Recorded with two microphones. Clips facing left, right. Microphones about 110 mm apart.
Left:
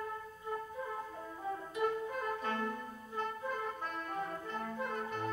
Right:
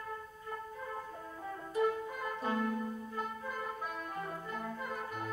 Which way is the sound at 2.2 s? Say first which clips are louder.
Right 5 dB; 10° right (ahead or behind).